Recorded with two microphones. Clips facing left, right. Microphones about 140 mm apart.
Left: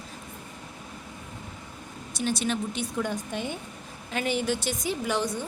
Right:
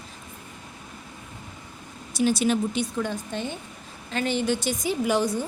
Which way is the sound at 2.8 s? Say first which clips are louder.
Right 2 dB; 10° left (ahead or behind).